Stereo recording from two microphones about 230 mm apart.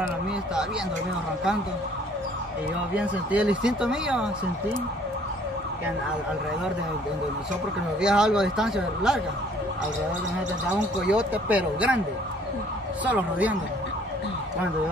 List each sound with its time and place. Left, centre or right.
2.9 s speech: centre
8.0 s speech: centre
11.1 s speech: centre
13.0 s speech: centre